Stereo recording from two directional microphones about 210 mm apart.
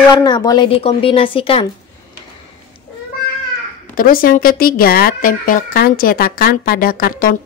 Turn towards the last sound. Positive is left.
turn(degrees=45)  # may be behind; listen again after turning